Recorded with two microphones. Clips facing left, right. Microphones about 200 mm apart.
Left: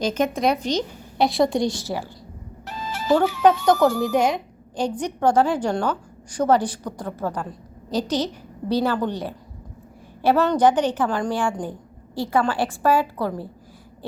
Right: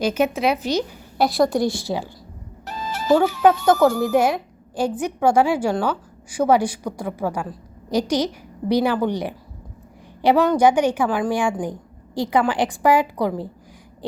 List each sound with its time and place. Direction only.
0.0 s a woman's voice: 10° right (ahead or behind)
2.6 s music: 40° right (ahead or behind)
3.7 s a woman's voice: 5° right (ahead or behind)